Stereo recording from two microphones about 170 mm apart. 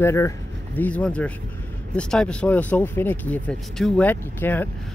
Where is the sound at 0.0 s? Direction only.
15° left (ahead or behind).